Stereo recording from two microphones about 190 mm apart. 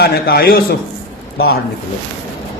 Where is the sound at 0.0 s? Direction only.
55° left (ahead or behind).